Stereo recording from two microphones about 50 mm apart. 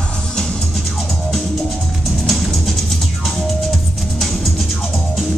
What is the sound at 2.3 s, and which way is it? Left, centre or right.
Music, centre.